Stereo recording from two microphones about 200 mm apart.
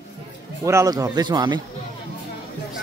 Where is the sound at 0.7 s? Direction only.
15° right (ahead or behind).